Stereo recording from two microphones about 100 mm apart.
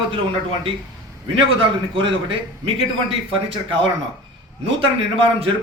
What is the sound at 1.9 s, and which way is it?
Speech, 60° right (ahead or behind).